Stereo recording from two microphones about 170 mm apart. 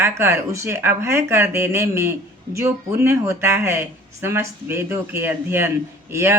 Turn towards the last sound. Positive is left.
turn(degrees=-15)  # may be behind; listen again after turning